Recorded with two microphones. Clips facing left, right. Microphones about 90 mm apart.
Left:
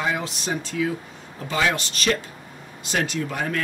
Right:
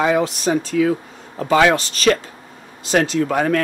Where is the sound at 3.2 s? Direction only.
75° right (ahead or behind).